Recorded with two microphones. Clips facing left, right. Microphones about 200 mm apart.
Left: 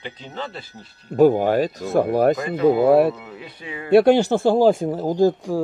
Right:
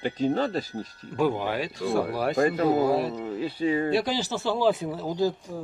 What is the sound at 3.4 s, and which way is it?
Speech, 35° right (ahead or behind).